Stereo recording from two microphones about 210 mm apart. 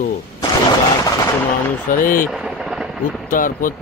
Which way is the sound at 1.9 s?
40° left (ahead or behind).